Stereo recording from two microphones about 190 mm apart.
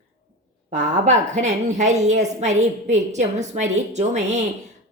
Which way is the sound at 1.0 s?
40° right (ahead or behind).